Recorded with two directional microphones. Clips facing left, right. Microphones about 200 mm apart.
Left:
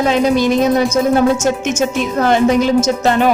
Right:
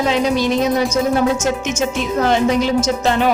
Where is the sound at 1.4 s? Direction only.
50° left (ahead or behind).